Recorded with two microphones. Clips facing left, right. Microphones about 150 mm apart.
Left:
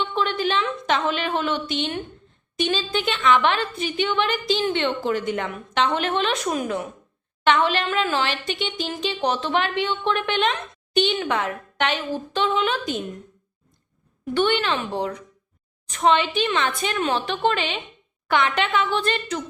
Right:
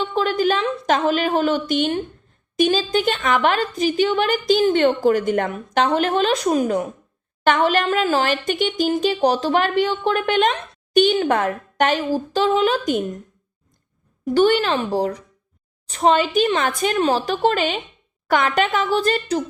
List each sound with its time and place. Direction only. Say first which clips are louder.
0.0 s a woman's voice: right 4 dB; 40° right (ahead or behind)
14.3 s a woman's voice: right 5 dB; 40° right (ahead or behind)